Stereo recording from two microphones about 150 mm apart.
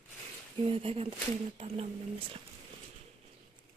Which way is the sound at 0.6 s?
40° right (ahead or behind).